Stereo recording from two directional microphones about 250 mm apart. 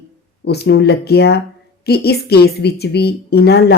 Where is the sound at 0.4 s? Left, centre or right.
Left.